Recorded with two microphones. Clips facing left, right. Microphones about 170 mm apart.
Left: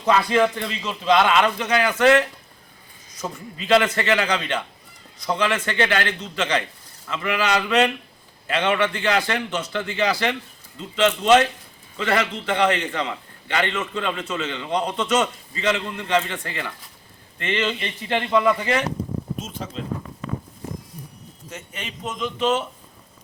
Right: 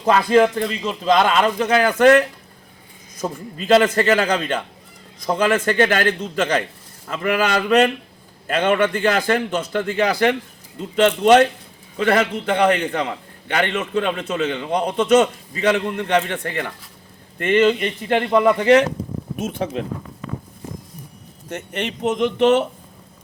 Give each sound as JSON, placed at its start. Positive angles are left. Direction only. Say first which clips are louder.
{"t": 0.0, "sound": "a man's voice", "louder": "right 4 dB", "side_deg": -40}
{"t": 3.2, "sound": "a man's voice", "louder": "right 5 dB", "side_deg": -10}
{"t": 3.6, "sound": "a man's voice", "louder": "right 4 dB", "side_deg": -45}
{"t": 14.8, "sound": "a man's voice", "louder": "right 4 dB", "side_deg": -15}
{"t": 15.0, "sound": "a man's voice", "louder": "right 7 dB", "side_deg": -60}
{"t": 18.4, "sound": "a man's voice", "louder": "right 7 dB", "side_deg": -65}
{"t": 21.5, "sound": "a man's voice", "louder": "right 10 dB", "side_deg": -65}